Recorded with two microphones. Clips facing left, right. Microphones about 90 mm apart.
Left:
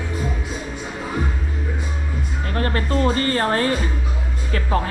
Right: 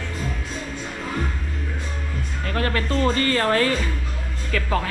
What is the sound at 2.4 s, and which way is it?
Music, 20° left (ahead or behind).